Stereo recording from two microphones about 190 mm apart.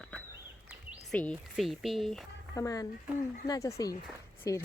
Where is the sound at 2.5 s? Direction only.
20° left (ahead or behind).